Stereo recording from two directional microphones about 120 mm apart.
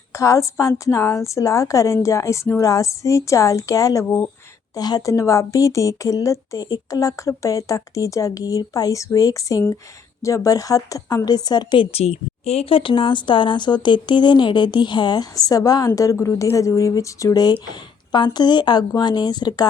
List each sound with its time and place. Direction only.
0.1 s a woman's voice: 25° left (ahead or behind)